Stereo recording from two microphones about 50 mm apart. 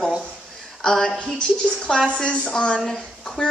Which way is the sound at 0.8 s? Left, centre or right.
Centre.